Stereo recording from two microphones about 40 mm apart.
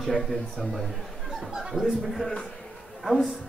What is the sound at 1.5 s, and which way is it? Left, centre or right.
Speech, centre.